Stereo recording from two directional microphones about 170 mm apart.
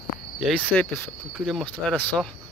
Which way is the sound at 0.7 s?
15° left (ahead or behind).